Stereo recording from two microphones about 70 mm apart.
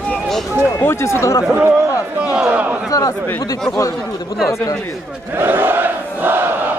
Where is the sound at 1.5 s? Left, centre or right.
Right.